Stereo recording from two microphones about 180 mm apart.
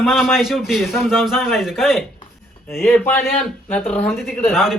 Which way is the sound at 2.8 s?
10° left (ahead or behind).